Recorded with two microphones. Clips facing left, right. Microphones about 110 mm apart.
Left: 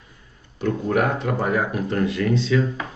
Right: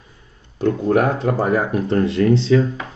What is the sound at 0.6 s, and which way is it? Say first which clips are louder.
Speech: right 4 dB; 35° right (ahead or behind).